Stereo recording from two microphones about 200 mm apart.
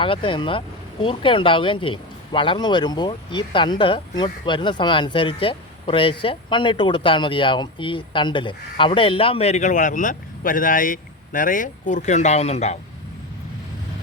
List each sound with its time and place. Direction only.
0.0 s speech: 25° left (ahead or behind)